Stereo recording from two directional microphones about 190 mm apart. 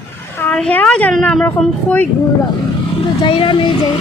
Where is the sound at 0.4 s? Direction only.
5° left (ahead or behind).